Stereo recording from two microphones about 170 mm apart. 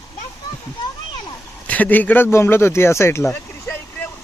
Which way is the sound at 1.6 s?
10° left (ahead or behind).